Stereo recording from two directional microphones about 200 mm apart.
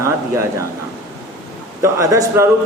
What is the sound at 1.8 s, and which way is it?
Speech, 15° right (ahead or behind).